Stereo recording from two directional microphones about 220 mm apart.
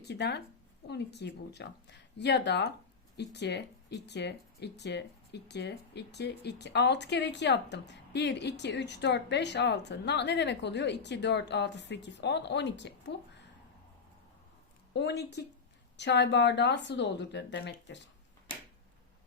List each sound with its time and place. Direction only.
0.0 s speech: 50° left (ahead or behind)
14.9 s speech: 50° left (ahead or behind)